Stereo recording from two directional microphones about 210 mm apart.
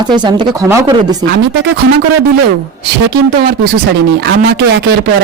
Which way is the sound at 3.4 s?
45° right (ahead or behind).